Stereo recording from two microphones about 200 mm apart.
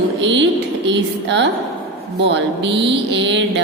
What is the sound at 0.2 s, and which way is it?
Speech, 65° right (ahead or behind).